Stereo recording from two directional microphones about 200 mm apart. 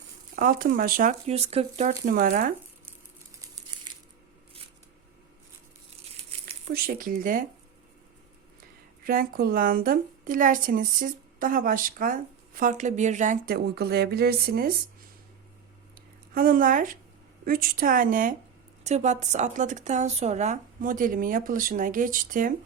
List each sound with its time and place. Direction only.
0.3 s a woman's voice: 45° right (ahead or behind)
1.3 s speech: 30° right (ahead or behind)
6.4 s speech: 45° right (ahead or behind)
9.0 s a woman's voice: 45° right (ahead or behind)
16.3 s a woman's voice: 45° right (ahead or behind)